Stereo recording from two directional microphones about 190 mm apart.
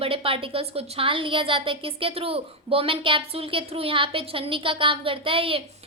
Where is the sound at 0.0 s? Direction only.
30° right (ahead or behind).